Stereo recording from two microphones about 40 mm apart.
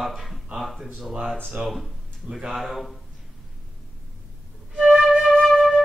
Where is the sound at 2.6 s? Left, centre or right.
Centre.